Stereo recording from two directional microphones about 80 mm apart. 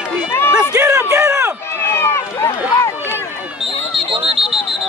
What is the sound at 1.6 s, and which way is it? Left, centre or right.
Run, left.